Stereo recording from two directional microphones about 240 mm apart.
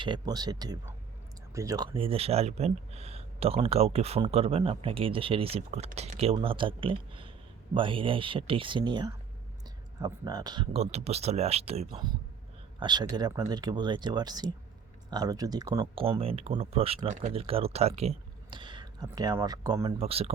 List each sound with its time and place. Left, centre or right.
0.0 s speech: centre